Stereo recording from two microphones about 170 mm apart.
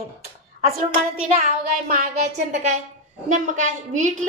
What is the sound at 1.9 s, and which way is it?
A woman's voice, 50° right (ahead or behind).